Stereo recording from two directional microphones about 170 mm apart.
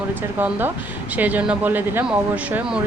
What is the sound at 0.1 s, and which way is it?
Speech, 10° right (ahead or behind).